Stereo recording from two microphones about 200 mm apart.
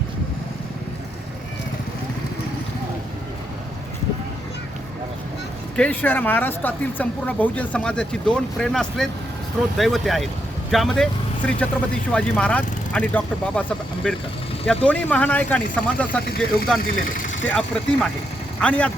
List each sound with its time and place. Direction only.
5.7 s speech: 5° left (ahead or behind)
16.2 s speech: 50° left (ahead or behind)
17.5 s speech: 5° left (ahead or behind)